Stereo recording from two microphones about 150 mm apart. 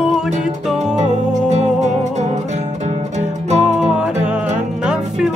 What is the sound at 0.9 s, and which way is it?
Music, 50° right (ahead or behind).